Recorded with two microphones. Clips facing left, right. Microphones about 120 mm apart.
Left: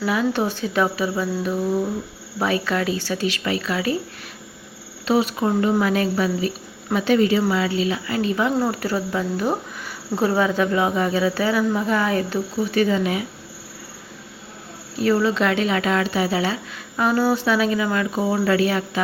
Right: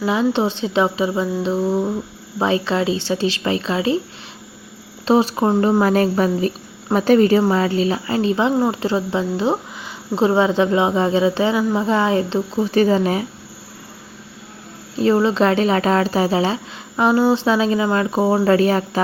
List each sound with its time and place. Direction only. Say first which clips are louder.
0.0 s speech: right 3 dB; 25° right (ahead or behind)
5.0 s speech: right 4 dB; 35° right (ahead or behind)
12.5 s speech: right 4 dB; 35° right (ahead or behind)
14.9 s speech: right 3 dB; 30° right (ahead or behind)